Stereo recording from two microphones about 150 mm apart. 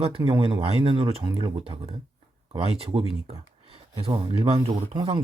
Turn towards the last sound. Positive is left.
turn(degrees=-35)  # may be behind; listen again after turning